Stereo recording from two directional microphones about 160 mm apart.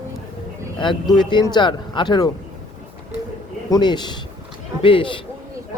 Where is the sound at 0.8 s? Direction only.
30° left (ahead or behind).